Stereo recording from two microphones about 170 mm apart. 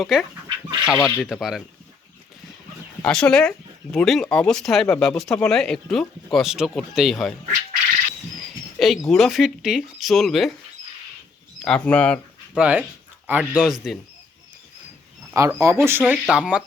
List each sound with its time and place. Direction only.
0.1 s speech: 5° right (ahead or behind)
0.4 s chicken: 25° right (ahead or behind)
1.0 s speech: centre (ahead or behind)
3.0 s speech: 5° left (ahead or behind)
8.8 s speech: centre (ahead or behind)
11.6 s speech: 5° left (ahead or behind)
12.5 s speech: 10° right (ahead or behind)
15.3 s speech: 15° right (ahead or behind)